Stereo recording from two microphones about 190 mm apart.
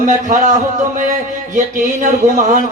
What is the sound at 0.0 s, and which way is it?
A man's voice, 45° right (ahead or behind).